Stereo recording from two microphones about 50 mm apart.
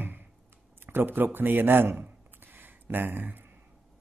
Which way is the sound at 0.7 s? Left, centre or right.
Right.